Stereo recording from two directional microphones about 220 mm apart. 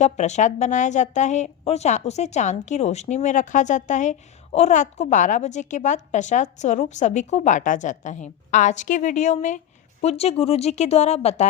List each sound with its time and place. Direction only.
0.0 s a woman's voice: 30° left (ahead or behind)